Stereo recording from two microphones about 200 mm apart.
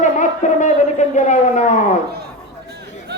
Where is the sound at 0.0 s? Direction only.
40° left (ahead or behind).